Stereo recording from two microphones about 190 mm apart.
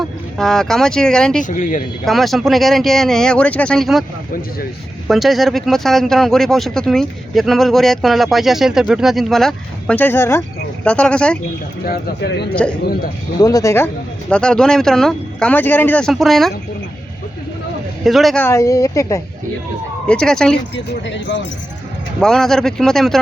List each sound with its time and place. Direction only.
0.3 s speech: centre (ahead or behind)
1.4 s speech: 40° left (ahead or behind)
2.0 s speech: centre (ahead or behind)
5.0 s speech: centre (ahead or behind)
11.9 s speech: 60° left (ahead or behind)
13.4 s speech: 20° left (ahead or behind); by 16.5 s centre (ahead or behind)
18.0 s speech: centre (ahead or behind)
18.4 s a woman's voice: 15° left (ahead or behind)
20.1 s speech: 5° left (ahead or behind)
20.7 s speech: 70° left (ahead or behind)
22.2 s speech: 5° left (ahead or behind)